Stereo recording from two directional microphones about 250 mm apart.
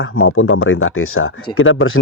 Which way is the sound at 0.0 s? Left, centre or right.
Left.